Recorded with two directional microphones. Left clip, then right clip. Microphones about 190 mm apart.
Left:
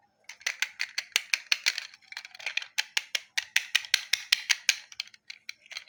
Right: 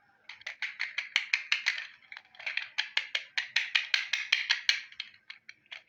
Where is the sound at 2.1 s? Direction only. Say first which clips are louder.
Left 2 dB; 45° left (ahead or behind).